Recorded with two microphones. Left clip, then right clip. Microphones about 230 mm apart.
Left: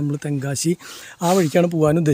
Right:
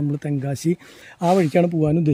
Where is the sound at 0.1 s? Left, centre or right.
Centre.